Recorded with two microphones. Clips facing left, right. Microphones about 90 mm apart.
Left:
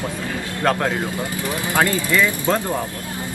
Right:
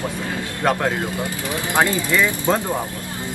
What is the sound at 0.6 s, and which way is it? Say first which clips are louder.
Speech: even; 5° right (ahead or behind).